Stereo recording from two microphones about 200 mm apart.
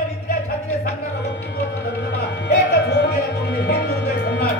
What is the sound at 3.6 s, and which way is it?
Music, 50° left (ahead or behind).